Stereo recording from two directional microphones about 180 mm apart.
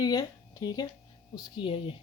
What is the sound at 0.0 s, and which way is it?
Speech, 20° left (ahead or behind).